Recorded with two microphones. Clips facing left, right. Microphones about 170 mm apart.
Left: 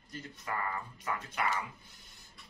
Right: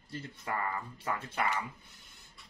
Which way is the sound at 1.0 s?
30° right (ahead or behind).